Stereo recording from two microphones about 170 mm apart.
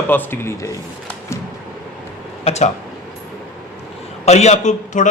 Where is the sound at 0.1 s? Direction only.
10° left (ahead or behind).